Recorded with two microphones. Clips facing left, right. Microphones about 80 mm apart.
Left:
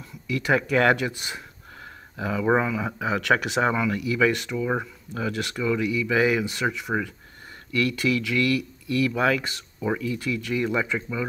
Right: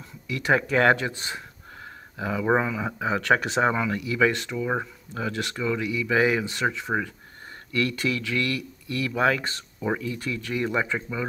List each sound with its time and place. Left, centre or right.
0.3 s speech: right
4.6 s speech: centre
5.1 s speech: right